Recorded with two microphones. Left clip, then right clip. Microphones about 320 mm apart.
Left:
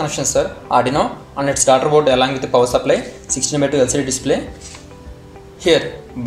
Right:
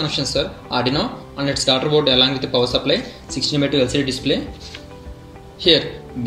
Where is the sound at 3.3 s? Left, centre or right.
Left.